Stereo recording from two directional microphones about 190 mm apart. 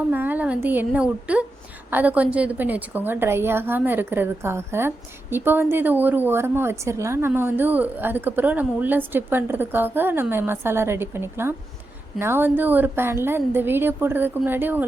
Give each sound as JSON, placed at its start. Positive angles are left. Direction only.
{"t": 0.1, "sound": "a woman's voice", "side_deg": -10}